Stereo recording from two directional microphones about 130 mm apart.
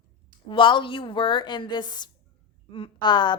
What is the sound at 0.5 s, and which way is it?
A woman's voice, 40° left (ahead or behind).